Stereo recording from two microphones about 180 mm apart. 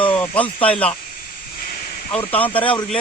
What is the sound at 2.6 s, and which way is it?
Speech, 30° left (ahead or behind).